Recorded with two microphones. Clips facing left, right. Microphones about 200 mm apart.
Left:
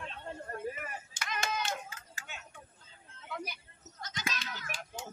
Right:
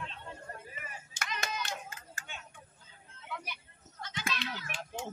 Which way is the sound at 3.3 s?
40° left (ahead or behind).